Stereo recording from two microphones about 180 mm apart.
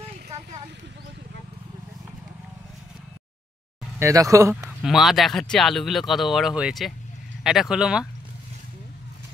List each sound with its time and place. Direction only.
4.0 s speech: 20° right (ahead or behind)
4.8 s speech: centre (ahead or behind)